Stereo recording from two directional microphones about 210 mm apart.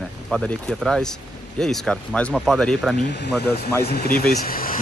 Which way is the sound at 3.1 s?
50° left (ahead or behind).